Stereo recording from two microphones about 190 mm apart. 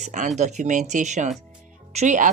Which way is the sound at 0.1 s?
40° right (ahead or behind).